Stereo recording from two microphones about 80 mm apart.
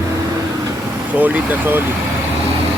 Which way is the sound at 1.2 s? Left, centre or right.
Right.